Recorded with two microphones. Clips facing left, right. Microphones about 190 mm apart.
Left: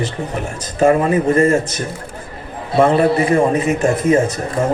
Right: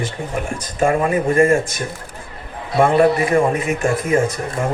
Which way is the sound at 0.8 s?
40° left (ahead or behind).